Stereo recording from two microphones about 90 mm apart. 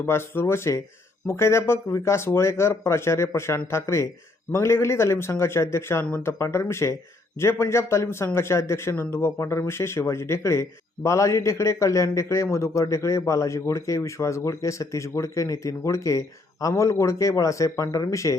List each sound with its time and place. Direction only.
0.0 s a man's voice: 25° left (ahead or behind)